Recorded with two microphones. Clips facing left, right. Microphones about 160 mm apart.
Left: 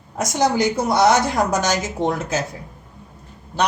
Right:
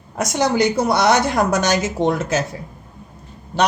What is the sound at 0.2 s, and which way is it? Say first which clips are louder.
A woman's voice: right 1 dB; 65° right (ahead or behind).